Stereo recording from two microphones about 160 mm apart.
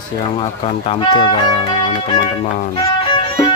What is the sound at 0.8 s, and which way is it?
Speech, 30° left (ahead or behind).